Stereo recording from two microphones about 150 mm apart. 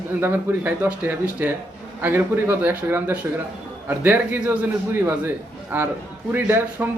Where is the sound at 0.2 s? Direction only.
10° right (ahead or behind).